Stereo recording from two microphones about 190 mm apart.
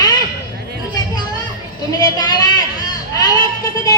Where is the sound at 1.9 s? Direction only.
20° left (ahead or behind).